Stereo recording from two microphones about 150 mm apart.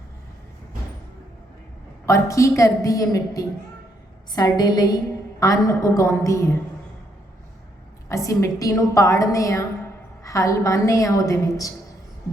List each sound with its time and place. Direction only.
2.0 s a woman's voice: 20° left (ahead or behind)
8.1 s a woman's voice: 20° left (ahead or behind)